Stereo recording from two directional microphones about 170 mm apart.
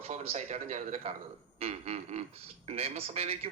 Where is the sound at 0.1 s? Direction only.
40° right (ahead or behind).